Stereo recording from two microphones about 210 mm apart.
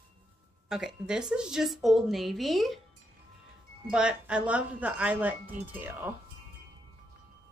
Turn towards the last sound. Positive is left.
turn(degrees=-10)  # may be behind; listen again after turning